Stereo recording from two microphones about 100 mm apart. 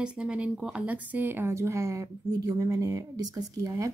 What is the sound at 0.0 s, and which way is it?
A woman's voice, 10° right (ahead or behind).